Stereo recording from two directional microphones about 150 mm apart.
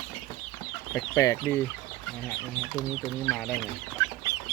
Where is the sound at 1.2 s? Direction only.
20° left (ahead or behind).